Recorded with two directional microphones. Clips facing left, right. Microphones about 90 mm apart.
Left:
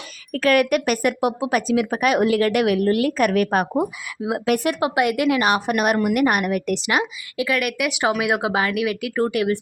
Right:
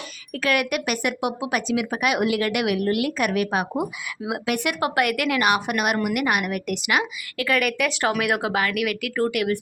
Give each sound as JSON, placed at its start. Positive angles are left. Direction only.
{"t": 0.3, "sound": "speech", "side_deg": 40}
{"t": 4.8, "sound": "speech", "side_deg": 25}
{"t": 7.4, "sound": "speech", "side_deg": 5}